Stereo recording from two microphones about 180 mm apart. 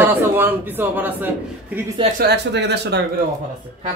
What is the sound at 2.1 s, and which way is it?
Speech, 65° right (ahead or behind).